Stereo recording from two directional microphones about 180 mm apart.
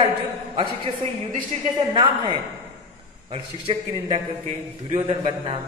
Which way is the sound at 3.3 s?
30° right (ahead or behind).